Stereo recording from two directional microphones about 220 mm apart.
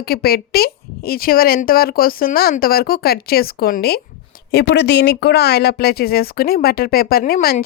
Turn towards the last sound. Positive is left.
turn(degrees=40)  # may be behind; listen again after turning